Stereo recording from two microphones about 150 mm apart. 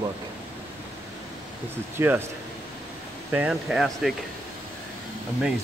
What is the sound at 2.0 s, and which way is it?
Speech, 20° right (ahead or behind).